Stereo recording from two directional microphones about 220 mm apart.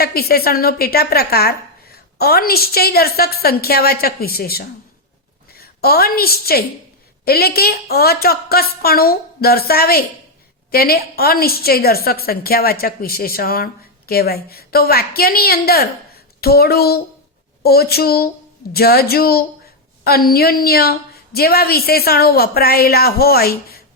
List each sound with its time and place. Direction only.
0.0 s a woman's voice: 45° left (ahead or behind)